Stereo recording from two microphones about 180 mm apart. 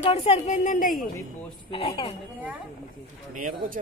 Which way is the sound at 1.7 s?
30° left (ahead or behind).